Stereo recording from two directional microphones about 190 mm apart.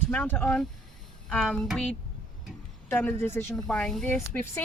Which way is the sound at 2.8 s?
10° left (ahead or behind).